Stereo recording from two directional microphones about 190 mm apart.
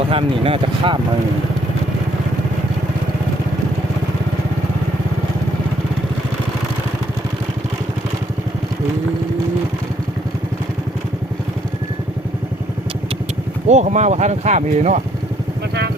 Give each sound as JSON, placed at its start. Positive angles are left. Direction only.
{"t": 0.1, "sound": "speech", "side_deg": -30}
{"t": 13.7, "sound": "speech", "side_deg": -40}